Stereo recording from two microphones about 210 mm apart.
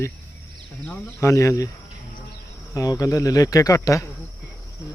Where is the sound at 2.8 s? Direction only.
15° left (ahead or behind).